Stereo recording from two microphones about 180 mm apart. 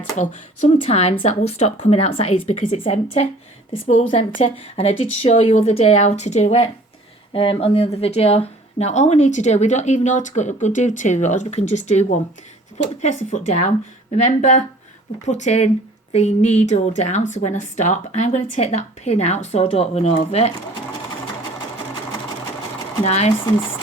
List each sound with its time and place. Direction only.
0.8 s speech: 35° left (ahead or behind)
23.0 s speech: 35° left (ahead or behind)